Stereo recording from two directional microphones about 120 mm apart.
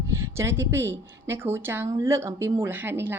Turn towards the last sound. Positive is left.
turn(degrees=-20)  # may be behind; listen again after turning